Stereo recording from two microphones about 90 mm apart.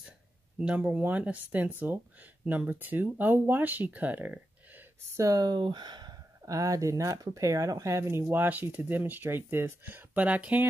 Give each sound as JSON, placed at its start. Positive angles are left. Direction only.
{"t": 0.6, "sound": "speech", "side_deg": -15}
{"t": 5.1, "sound": "speech", "side_deg": -40}
{"t": 6.4, "sound": "speech", "side_deg": -40}